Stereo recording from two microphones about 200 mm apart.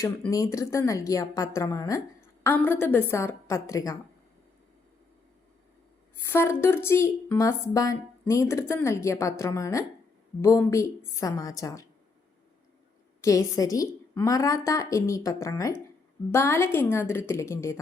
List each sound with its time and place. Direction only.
0.3 s a woman's voice: 15° left (ahead or behind)
6.2 s a woman's voice: 10° left (ahead or behind)
13.2 s a woman's voice: 15° left (ahead or behind)